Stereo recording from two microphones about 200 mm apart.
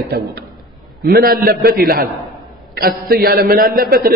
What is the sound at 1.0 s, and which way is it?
Speech, 50° right (ahead or behind).